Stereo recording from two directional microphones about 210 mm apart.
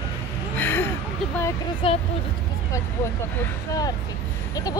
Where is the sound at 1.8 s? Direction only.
25° left (ahead or behind).